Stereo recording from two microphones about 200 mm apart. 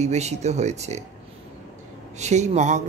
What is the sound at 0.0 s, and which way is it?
Speech, 35° right (ahead or behind).